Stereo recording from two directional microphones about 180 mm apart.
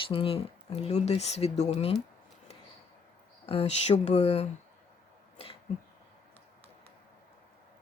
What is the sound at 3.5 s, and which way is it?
Speech, 35° left (ahead or behind).